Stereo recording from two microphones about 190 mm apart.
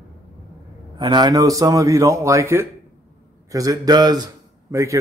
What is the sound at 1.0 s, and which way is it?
A man's voice, 20° right (ahead or behind).